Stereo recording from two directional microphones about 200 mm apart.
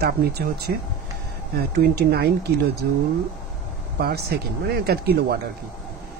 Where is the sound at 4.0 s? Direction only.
50° right (ahead or behind).